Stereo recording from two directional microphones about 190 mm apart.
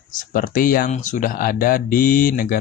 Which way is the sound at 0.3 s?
45° left (ahead or behind).